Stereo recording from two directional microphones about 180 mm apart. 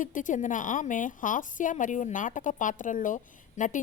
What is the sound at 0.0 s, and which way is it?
A woman's voice, 45° left (ahead or behind).